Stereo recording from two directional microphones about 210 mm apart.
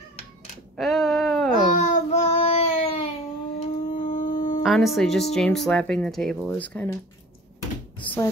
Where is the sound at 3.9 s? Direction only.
40° left (ahead or behind).